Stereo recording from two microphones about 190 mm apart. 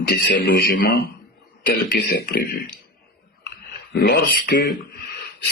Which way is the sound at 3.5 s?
60° left (ahead or behind).